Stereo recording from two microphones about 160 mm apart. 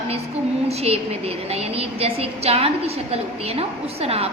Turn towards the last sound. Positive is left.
turn(degrees=-40)  # may be behind; listen again after turning